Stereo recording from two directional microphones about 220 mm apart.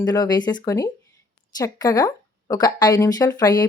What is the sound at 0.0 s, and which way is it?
Speech, 20° left (ahead or behind).